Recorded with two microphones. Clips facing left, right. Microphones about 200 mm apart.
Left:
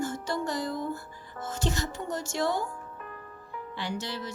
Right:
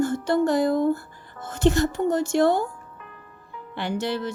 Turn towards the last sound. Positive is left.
turn(degrees=-60)  # may be behind; listen again after turning